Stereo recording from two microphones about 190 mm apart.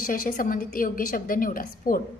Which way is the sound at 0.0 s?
45° left (ahead or behind).